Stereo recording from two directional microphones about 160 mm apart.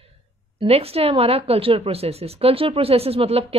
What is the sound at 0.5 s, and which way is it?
Speech, 40° right (ahead or behind).